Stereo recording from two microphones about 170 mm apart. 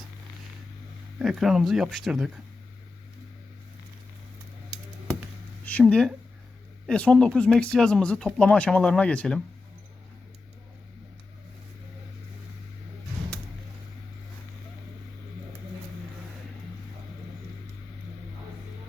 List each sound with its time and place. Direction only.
1.2 s speech: centre (ahead or behind)
5.6 s speech: 5° left (ahead or behind)